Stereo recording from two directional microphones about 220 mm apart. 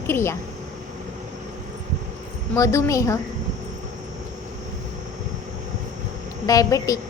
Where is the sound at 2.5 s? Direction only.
15° left (ahead or behind).